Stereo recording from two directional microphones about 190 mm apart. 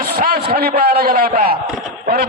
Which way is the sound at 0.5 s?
55° right (ahead or behind).